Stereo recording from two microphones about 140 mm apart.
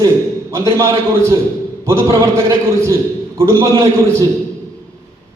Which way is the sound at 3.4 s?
25° right (ahead or behind).